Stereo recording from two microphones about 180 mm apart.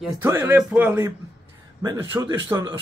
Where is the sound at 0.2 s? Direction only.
10° right (ahead or behind).